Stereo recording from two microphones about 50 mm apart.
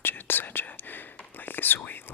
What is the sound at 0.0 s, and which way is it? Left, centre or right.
Whispering, left.